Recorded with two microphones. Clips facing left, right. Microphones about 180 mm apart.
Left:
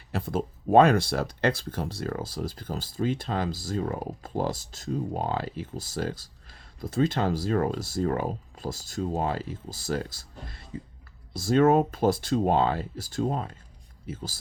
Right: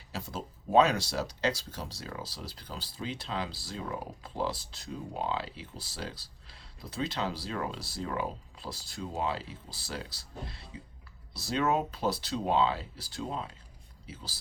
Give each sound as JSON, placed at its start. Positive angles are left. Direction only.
{"t": 0.1, "sound": "speech", "side_deg": 55}